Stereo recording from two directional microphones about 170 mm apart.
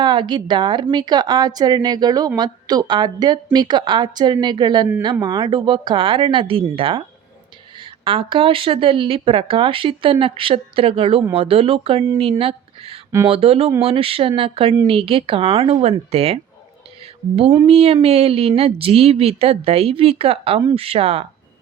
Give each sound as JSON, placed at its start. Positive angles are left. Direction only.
{"t": 0.0, "sound": "a woman's voice", "side_deg": -30}
{"t": 17.7, "sound": "speech", "side_deg": -35}